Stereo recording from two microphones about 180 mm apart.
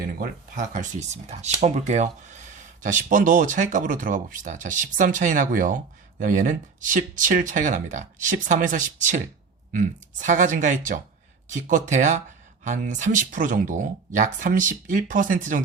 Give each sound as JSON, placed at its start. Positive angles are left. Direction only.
{"t": 0.2, "sound": "speech", "side_deg": -45}